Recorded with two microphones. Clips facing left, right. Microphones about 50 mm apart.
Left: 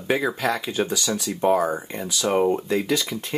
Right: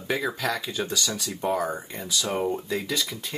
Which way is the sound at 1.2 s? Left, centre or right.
Left.